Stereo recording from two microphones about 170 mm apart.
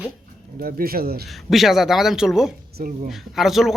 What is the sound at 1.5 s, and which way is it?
Speech, centre (ahead or behind).